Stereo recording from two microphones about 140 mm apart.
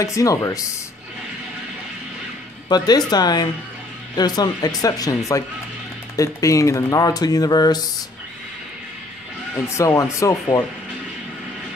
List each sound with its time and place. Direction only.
0.0 s speech: 25° left (ahead or behind)
2.7 s speech: 30° left (ahead or behind)
9.8 s speech: 20° left (ahead or behind)